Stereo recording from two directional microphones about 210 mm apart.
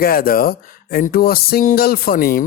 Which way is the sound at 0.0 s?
45° left (ahead or behind).